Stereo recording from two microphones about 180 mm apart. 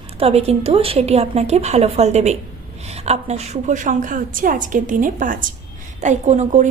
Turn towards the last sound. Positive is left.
turn(degrees=-40)  # may be behind; listen again after turning